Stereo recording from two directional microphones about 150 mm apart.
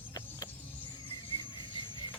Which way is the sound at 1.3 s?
35° left (ahead or behind).